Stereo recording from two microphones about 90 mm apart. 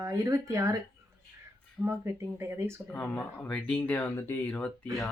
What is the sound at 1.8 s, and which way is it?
Speech, 25° right (ahead or behind).